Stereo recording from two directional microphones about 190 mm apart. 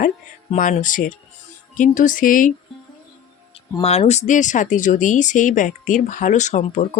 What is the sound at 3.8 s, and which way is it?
Speech, 35° left (ahead or behind).